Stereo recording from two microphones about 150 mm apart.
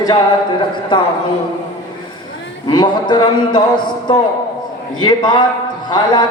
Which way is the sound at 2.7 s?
30° left (ahead or behind).